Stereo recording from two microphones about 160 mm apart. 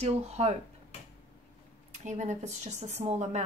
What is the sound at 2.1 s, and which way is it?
A woman's voice, 45° right (ahead or behind).